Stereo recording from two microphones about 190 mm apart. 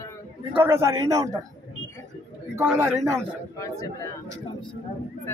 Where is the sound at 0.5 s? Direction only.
15° right (ahead or behind).